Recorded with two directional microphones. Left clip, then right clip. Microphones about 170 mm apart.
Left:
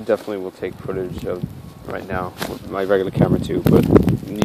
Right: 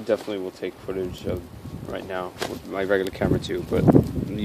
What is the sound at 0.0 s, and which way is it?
Speech, 25° left (ahead or behind).